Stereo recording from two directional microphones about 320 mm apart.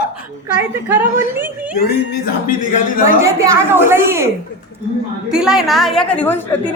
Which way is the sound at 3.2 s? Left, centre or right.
Centre.